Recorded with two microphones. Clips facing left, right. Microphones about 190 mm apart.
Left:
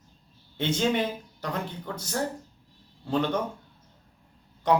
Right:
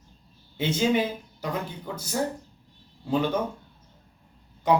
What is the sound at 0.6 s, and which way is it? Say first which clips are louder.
A man's voice: right 2 dB; 5° right (ahead or behind).